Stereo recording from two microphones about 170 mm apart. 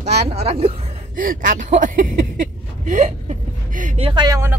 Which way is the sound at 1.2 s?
55° right (ahead or behind).